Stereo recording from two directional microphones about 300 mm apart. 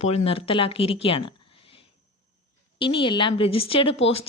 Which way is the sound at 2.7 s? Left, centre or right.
Centre.